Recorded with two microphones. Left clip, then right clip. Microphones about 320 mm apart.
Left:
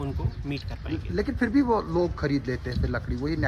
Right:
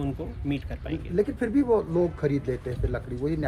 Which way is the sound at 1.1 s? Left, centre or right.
Left.